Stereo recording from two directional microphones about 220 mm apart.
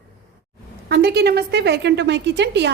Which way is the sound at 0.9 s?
45° right (ahead or behind).